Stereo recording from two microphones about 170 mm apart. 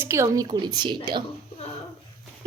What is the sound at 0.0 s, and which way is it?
A woman's voice, 15° right (ahead or behind).